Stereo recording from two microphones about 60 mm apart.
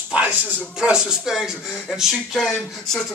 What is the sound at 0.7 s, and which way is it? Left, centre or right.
Speech, centre.